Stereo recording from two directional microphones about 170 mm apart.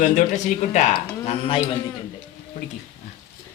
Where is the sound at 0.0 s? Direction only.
45° left (ahead or behind).